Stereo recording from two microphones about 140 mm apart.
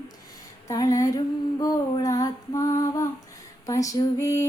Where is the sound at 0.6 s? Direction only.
25° left (ahead or behind).